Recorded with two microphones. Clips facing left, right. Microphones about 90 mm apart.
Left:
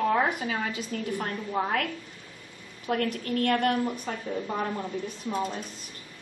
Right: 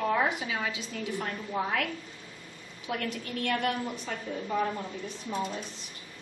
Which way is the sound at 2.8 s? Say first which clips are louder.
Left 6 dB; 50° left (ahead or behind).